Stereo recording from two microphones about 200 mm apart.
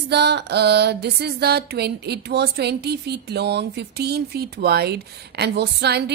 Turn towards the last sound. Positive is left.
turn(degrees=-55)  # may be behind; listen again after turning